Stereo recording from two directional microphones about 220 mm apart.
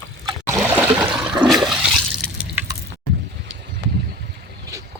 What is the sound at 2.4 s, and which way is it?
Squish, 10° right (ahead or behind).